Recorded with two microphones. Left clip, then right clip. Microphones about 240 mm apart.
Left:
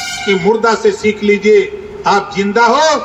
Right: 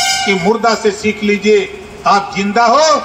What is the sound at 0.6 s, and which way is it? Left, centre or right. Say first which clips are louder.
A man's voice: left 1 dB; centre.